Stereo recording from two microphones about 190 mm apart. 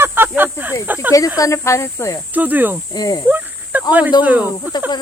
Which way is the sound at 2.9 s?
20° left (ahead or behind).